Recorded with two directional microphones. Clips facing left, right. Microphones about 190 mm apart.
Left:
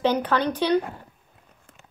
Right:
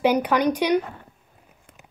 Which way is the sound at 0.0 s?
10° right (ahead or behind).